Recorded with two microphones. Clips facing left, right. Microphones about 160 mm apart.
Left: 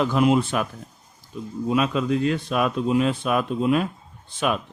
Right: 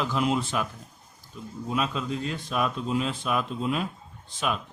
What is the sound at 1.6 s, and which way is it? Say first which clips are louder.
Speech: left 7 dB; 70° left (ahead or behind).